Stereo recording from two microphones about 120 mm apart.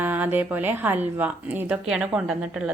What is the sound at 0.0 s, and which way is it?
A woman's voice, 15° right (ahead or behind).